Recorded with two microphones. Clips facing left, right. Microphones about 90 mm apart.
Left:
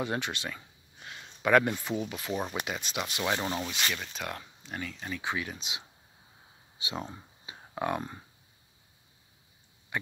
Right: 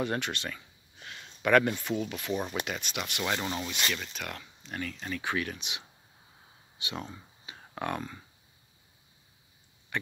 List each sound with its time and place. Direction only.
0.0 s speech: 15° left (ahead or behind)
3.6 s speech: 10° left (ahead or behind)
4.1 s speech: 25° left (ahead or behind)
6.9 s speech: 25° left (ahead or behind)